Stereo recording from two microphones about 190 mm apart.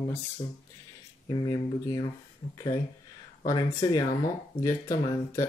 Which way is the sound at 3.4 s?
15° left (ahead or behind).